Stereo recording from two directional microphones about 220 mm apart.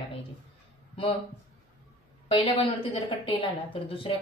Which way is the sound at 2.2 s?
25° left (ahead or behind).